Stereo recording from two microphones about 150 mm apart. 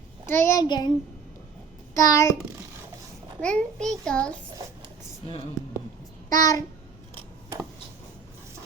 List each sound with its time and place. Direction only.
0.3 s a child's voice: 15° left (ahead or behind)
2.0 s a child's voice: 20° left (ahead or behind)
3.4 s a child's voice: 5° left (ahead or behind)
6.3 s a child's voice: 25° left (ahead or behind)